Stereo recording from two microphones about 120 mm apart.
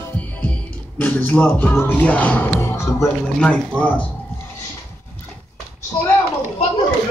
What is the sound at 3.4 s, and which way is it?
Music, 10° left (ahead or behind).